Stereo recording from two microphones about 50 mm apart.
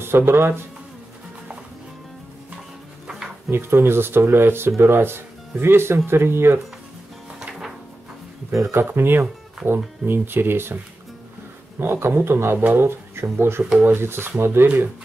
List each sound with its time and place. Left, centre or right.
0.0 s speech: right
3.4 s speech: right
8.7 s speech: right
9.6 s speech: centre
10.0 s speech: right
11.8 s speech: right